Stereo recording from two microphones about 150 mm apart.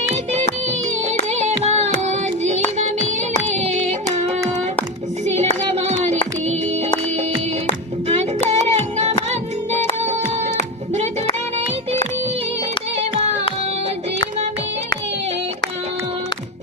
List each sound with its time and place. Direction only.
1.3 s music: 50° right (ahead or behind)
3.5 s yodeling: 50° right (ahead or behind)
5.2 s child singing: 45° right (ahead or behind)
8.0 s music: 45° right (ahead or behind)